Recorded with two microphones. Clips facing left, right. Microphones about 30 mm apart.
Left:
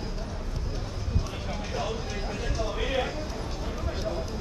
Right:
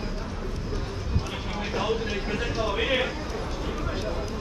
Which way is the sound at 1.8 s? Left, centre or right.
Right.